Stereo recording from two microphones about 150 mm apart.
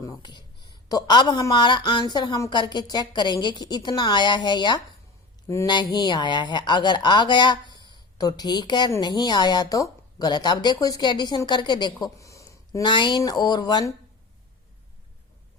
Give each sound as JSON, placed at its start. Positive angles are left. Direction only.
{"t": 0.0, "sound": "speech", "side_deg": 25}